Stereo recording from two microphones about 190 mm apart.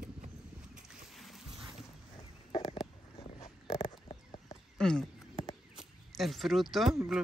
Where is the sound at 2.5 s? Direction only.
25° left (ahead or behind).